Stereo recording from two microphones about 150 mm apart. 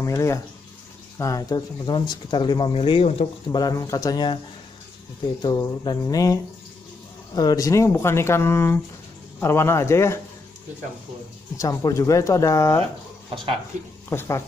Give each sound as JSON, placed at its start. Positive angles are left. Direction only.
{"t": 0.0, "sound": "speech", "side_deg": 20}
{"t": 3.4, "sound": "speech", "side_deg": 25}
{"t": 5.4, "sound": "speech", "side_deg": 25}
{"t": 11.5, "sound": "speech", "side_deg": 20}
{"t": 14.0, "sound": "speech", "side_deg": 15}